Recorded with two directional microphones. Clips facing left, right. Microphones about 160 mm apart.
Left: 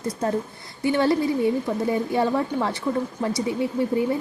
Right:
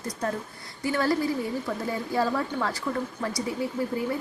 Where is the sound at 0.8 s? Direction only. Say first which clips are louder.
Left 5 dB; 25° left (ahead or behind).